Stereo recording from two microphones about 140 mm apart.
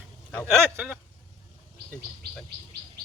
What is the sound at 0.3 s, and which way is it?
Speech, 10° left (ahead or behind).